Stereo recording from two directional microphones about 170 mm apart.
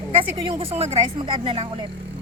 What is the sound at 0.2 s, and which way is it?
Speech, 30° right (ahead or behind).